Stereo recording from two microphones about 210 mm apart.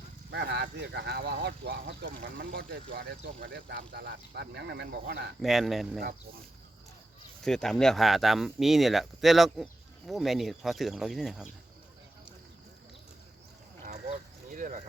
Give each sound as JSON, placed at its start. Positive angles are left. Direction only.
{"t": 0.3, "sound": "speech", "side_deg": -50}
{"t": 5.4, "sound": "speech", "side_deg": 0}
{"t": 7.4, "sound": "speech", "side_deg": 0}
{"t": 13.8, "sound": "a sound", "side_deg": -40}